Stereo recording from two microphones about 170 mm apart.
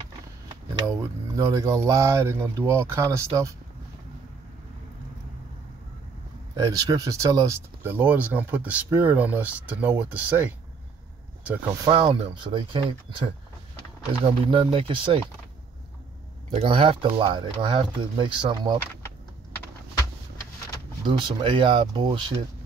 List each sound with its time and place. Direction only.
0.8 s speech: 20° right (ahead or behind)
6.5 s speech: 20° right (ahead or behind)
11.8 s speech: 30° right (ahead or behind)
16.5 s speech: 35° right (ahead or behind)
21.2 s speech: 30° right (ahead or behind)